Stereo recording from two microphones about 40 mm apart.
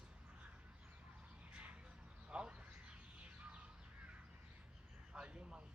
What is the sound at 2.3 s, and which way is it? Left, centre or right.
Bird, right.